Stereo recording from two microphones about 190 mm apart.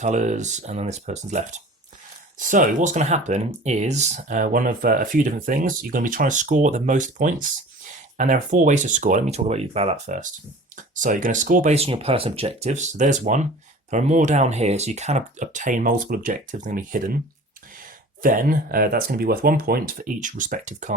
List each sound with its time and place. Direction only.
0.0 s speech: 40° right (ahead or behind)
18.2 s speech: 45° right (ahead or behind)